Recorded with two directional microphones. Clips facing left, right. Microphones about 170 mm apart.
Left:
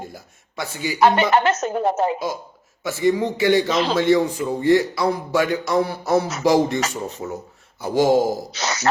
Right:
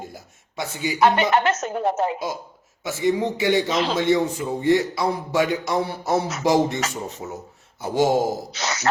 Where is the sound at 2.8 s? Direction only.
20° right (ahead or behind).